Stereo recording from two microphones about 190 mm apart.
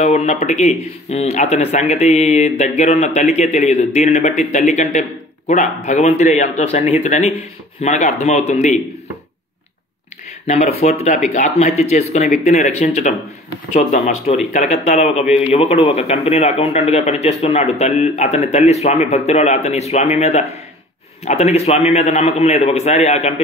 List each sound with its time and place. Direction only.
0.0 s a man's voice: 35° left (ahead or behind)
10.4 s a man's voice: 35° left (ahead or behind)